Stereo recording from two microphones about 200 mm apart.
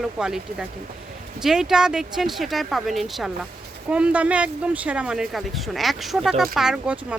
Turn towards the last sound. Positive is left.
turn(degrees=-5)  # may be behind; listen again after turning